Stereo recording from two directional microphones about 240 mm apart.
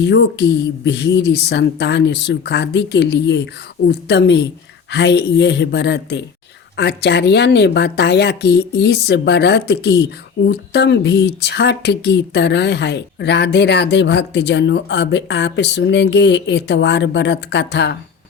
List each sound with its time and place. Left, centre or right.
0.0 s a woman's voice: left